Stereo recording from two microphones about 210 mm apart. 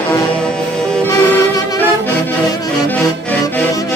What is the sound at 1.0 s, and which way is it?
Music, 15° left (ahead or behind).